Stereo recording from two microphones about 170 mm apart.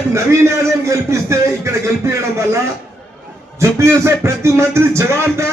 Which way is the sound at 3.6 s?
15° right (ahead or behind).